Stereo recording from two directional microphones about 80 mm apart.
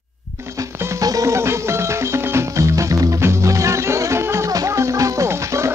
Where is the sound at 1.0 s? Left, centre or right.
Right.